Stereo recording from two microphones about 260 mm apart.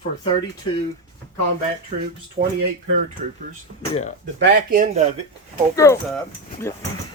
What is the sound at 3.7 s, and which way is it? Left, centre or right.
Speech, right.